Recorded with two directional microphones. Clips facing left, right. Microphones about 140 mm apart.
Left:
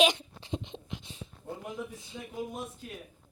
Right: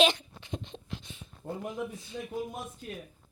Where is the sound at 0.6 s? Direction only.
20° left (ahead or behind).